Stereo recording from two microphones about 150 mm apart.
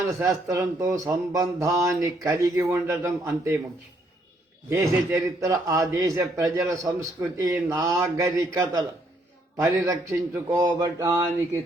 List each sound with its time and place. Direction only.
0.1 s speech: 20° right (ahead or behind)
4.7 s speech: 20° right (ahead or behind)